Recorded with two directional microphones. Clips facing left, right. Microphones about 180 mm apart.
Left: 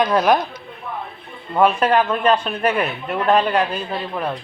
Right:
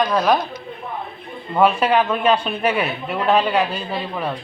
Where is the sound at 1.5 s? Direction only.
5° right (ahead or behind).